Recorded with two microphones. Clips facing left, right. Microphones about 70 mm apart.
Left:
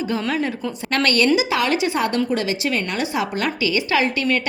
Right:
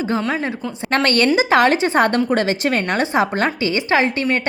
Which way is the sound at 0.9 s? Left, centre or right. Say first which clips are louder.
Right 2 dB; right.